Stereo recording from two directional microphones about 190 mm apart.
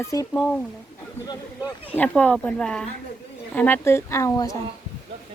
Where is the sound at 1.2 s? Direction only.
20° left (ahead or behind).